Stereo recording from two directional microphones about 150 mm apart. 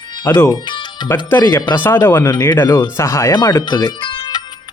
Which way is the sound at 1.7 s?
15° left (ahead or behind).